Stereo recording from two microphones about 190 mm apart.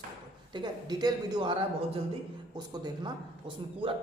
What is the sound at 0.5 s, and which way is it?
Speech, 20° right (ahead or behind).